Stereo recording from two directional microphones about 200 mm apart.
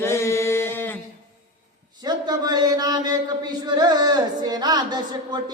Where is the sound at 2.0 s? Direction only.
20° right (ahead or behind).